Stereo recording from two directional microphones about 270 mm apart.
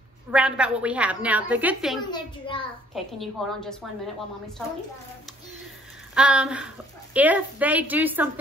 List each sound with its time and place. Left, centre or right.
0.3 s a woman's voice: centre
2.0 s a child's voice: centre
2.9 s a woman's voice: centre
6.1 s a woman's voice: centre